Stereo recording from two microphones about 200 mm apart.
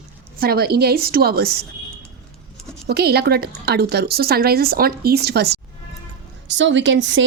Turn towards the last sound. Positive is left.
turn(degrees=-70)  # may be behind; listen again after turning